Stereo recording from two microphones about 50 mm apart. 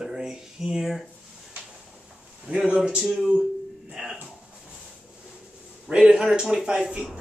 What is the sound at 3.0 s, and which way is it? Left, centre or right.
Speech, centre.